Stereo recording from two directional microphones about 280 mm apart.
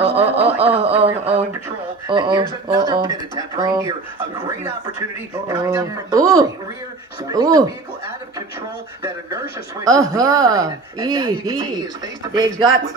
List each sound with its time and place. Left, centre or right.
0.0 s a sound: right
2.0 s speech: centre
5.5 s speech: centre